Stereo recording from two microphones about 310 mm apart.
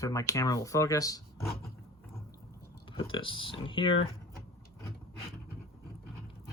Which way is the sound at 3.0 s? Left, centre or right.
Centre.